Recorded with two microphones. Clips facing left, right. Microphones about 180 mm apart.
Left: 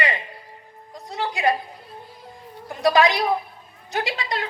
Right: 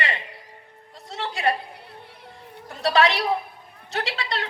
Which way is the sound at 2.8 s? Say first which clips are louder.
Left 2 dB; 15° left (ahead or behind).